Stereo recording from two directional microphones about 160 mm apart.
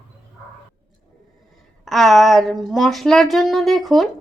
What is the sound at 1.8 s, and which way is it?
A woman's voice, centre (ahead or behind).